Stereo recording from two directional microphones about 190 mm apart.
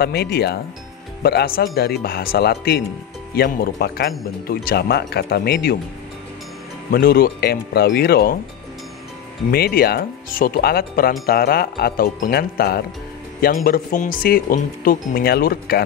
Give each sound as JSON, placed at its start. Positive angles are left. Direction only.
{"t": 0.0, "sound": "speech", "side_deg": 55}
{"t": 6.9, "sound": "speech", "side_deg": 50}
{"t": 9.5, "sound": "speech", "side_deg": 55}